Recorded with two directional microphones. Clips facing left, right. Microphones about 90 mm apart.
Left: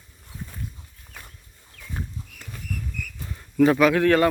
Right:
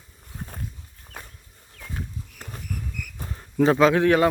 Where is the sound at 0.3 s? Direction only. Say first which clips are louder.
Right 1 dB; 45° right (ahead or behind).